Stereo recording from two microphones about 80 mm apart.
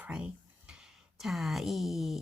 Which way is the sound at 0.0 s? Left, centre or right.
Centre.